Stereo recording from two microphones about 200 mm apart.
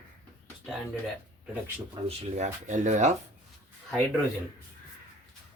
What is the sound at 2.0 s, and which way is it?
Speech, 35° right (ahead or behind).